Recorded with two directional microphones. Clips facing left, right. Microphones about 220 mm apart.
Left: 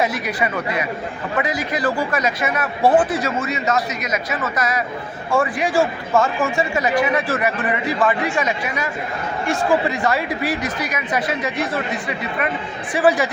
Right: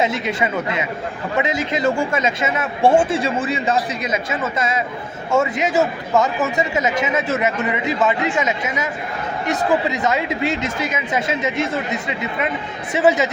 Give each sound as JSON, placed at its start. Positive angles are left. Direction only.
{"t": 0.0, "sound": "a man's voice", "side_deg": -25}